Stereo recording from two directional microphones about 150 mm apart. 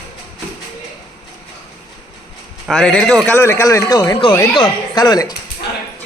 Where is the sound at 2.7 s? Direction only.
5° left (ahead or behind).